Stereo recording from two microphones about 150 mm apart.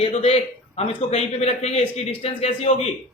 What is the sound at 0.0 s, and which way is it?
A man's voice, 40° left (ahead or behind).